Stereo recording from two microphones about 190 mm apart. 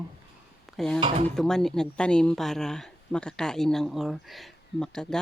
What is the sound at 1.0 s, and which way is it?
Speech, 30° right (ahead or behind).